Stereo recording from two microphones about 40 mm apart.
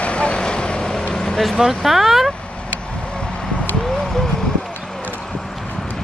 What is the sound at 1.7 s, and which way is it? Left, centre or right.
Speech, centre.